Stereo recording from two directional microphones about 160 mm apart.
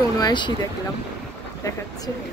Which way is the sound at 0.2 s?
30° left (ahead or behind).